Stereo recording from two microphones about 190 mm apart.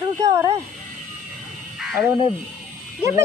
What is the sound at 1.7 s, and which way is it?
Frog, 5° right (ahead or behind).